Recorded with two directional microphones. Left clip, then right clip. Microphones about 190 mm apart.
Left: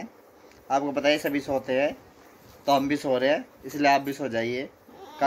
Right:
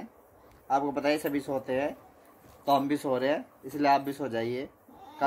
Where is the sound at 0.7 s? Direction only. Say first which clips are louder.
Left 4 dB; 15° right (ahead or behind).